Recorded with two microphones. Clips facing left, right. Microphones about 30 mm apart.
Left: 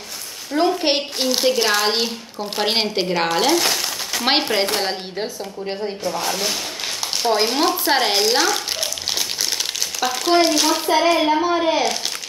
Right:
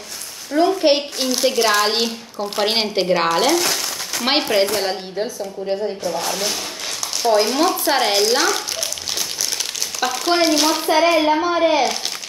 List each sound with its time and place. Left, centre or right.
0.6 s speech: centre
6.0 s speech: centre
10.1 s speech: centre